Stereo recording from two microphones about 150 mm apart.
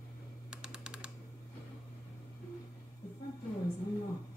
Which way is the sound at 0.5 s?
5° right (ahead or behind).